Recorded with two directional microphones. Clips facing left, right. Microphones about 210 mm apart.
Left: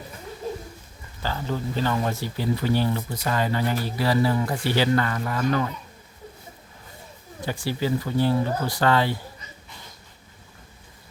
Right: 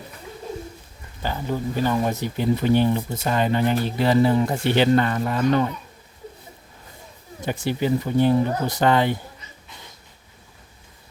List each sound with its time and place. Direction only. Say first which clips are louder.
1.2 s speech: right 2 dB; 15° right (ahead or behind)
7.4 s speech: right 3 dB; 20° right (ahead or behind)